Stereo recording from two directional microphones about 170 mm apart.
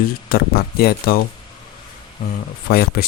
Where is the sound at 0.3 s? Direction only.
65° left (ahead or behind).